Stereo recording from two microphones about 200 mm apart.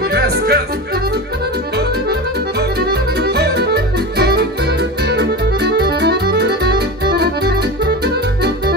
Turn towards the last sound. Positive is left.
turn(degrees=-55)  # may be behind; listen again after turning